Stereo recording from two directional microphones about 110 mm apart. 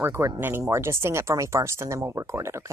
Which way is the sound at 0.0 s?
25° right (ahead or behind).